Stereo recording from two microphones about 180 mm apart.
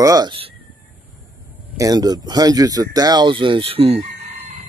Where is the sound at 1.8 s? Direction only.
20° right (ahead or behind).